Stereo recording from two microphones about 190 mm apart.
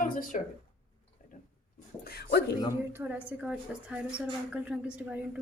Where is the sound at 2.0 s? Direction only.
55° left (ahead or behind).